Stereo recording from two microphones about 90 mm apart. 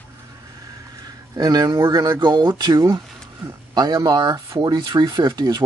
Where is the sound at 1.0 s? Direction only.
45° right (ahead or behind).